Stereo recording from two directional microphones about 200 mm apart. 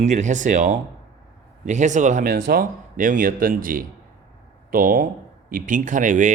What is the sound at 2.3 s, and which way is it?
Speech, 50° right (ahead or behind).